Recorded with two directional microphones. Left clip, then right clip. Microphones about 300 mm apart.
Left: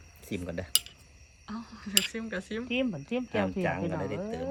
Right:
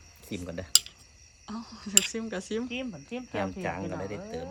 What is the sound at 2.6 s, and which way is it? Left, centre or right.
Speech, left.